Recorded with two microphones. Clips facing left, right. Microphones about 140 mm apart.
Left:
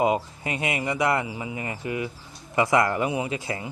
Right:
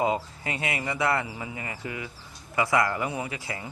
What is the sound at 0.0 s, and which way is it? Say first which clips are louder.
Speech: left 3 dB; 20° left (ahead or behind).